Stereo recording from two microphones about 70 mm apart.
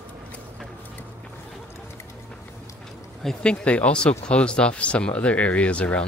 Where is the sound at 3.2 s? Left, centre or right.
Centre.